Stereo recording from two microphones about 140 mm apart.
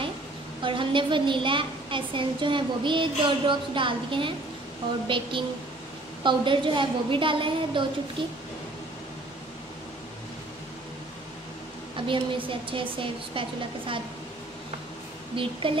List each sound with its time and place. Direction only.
0.7 s a woman's voice: 35° right (ahead or behind)
12.1 s a woman's voice: 40° right (ahead or behind)
15.3 s a woman's voice: 40° right (ahead or behind)